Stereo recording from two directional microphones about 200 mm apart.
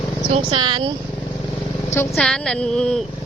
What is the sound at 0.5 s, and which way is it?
Speech, 25° right (ahead or behind).